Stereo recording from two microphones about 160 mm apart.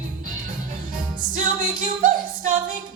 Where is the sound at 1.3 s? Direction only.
55° right (ahead or behind).